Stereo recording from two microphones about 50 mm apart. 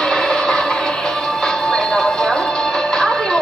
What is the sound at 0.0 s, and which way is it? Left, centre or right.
Music, centre.